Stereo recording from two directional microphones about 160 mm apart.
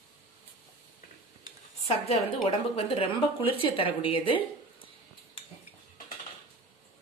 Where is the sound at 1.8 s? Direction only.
40° left (ahead or behind).